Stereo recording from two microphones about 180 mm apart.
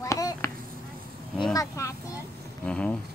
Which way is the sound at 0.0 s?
20° left (ahead or behind).